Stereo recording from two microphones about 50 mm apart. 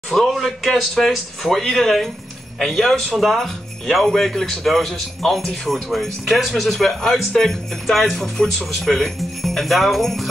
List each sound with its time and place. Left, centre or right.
0.1 s a man's voice: centre